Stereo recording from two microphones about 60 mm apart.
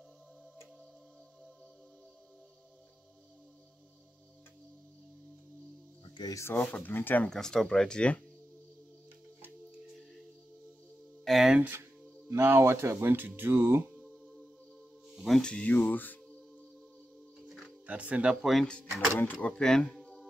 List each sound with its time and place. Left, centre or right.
6.4 s speech: left
7.2 s speech: centre
11.2 s a sound: centre
12.3 s speech: right
12.9 s speech: right
14.0 s music: centre
15.4 s speech: centre
15.8 s speech: left
17.8 s speech: right
18.3 s speech: centre
18.7 s speech: centre